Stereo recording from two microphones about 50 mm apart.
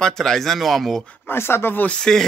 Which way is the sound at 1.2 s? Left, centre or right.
Left.